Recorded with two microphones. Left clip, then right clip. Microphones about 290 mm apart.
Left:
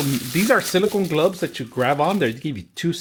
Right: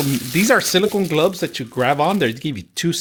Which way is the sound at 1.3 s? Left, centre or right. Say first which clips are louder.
Right 2 dB; centre.